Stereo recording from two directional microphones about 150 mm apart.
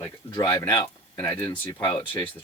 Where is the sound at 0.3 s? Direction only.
30° left (ahead or behind).